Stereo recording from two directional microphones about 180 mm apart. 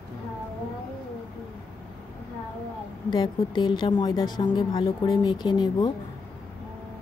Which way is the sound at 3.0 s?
25° left (ahead or behind).